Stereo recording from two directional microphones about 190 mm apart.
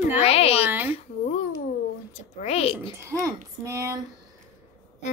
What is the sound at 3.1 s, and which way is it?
Speech, 15° right (ahead or behind).